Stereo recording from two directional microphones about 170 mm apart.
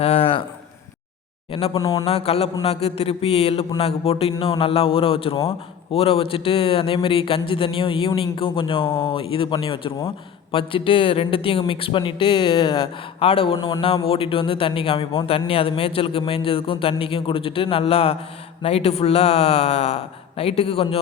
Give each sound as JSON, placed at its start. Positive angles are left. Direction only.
{"t": 0.0, "sound": "a sound", "side_deg": 35}
{"t": 1.5, "sound": "speech", "side_deg": 30}
{"t": 2.0, "sound": "speech", "side_deg": 35}